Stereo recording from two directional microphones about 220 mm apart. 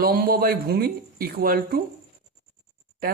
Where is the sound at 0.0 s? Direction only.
45° right (ahead or behind).